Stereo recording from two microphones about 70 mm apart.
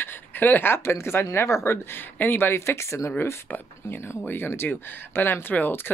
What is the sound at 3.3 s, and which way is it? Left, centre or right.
Speech, left.